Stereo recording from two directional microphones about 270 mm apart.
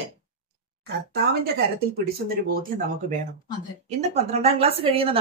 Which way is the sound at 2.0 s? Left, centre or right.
Right.